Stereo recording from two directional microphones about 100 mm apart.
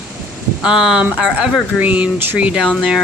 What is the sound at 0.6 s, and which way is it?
Speech, 5° right (ahead or behind).